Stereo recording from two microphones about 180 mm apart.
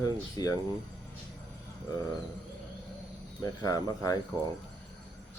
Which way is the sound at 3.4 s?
20° left (ahead or behind).